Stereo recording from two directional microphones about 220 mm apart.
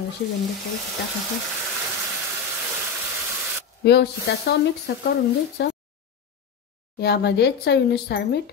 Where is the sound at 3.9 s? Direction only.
50° left (ahead or behind).